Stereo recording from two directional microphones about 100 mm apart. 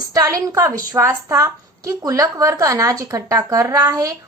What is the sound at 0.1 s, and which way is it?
A woman's voice, 35° right (ahead or behind).